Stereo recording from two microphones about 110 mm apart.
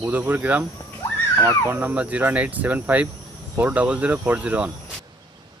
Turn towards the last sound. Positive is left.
turn(degrees=-10)  # may be behind; listen again after turning